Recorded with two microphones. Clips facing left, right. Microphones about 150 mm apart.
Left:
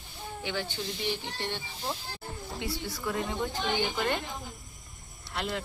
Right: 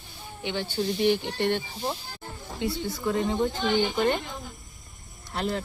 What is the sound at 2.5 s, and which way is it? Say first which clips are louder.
A woman's voice: right 7 dB; 25° right (ahead or behind).